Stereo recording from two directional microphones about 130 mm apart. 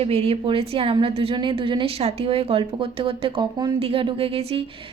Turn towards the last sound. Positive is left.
turn(degrees=-50)  # may be behind; listen again after turning